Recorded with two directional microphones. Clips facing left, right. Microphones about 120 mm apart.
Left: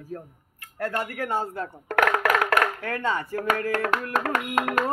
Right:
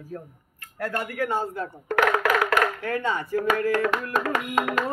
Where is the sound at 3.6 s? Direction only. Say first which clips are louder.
Right 2 dB; 55° left (ahead or behind).